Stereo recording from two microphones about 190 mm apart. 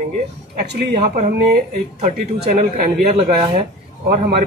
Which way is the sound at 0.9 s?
40° right (ahead or behind).